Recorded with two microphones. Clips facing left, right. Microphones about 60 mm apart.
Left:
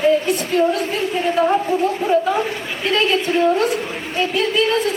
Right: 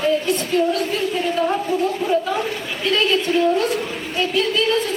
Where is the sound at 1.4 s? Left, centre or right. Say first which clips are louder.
Left 3 dB; left.